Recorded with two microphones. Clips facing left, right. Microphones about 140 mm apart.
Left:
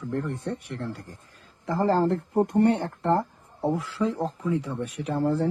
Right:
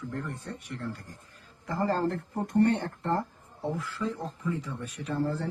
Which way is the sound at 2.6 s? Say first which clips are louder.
Right 2 dB; 70° left (ahead or behind).